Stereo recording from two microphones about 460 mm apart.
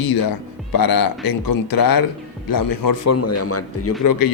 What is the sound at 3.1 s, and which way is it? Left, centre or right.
Speech, left.